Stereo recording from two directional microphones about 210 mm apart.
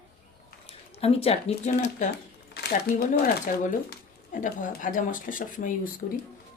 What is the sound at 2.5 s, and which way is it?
Speech, 50° left (ahead or behind).